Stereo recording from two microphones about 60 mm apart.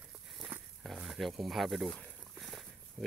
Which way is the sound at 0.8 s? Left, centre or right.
Centre.